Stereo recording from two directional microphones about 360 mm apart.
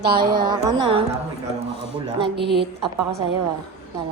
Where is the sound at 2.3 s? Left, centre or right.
Right.